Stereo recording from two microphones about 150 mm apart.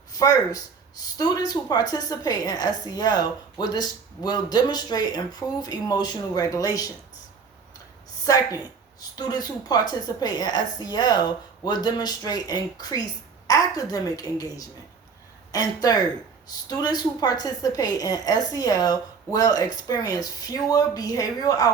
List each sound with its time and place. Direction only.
0.1 s a woman's voice: 25° left (ahead or behind)
8.5 s a woman's voice: 25° left (ahead or behind)